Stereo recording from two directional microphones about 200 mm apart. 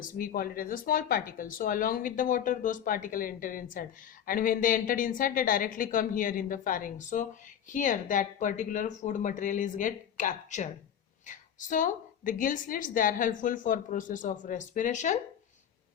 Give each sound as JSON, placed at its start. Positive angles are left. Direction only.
{"t": 0.0, "sound": "a woman's voice", "side_deg": 45}